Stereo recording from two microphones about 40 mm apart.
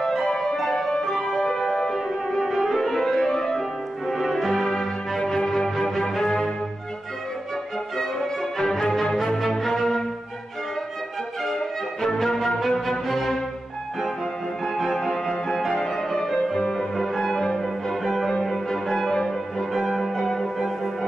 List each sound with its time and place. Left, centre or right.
0.3 s music: centre
5.2 s music: centre
8.0 s music: centre
11.4 s music: centre
14.6 s music: centre
16.5 s music: centre
16.9 s music: centre
19.7 s music: centre
20.0 s music: centre